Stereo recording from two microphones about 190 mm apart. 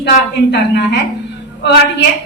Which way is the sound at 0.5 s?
65° left (ahead or behind).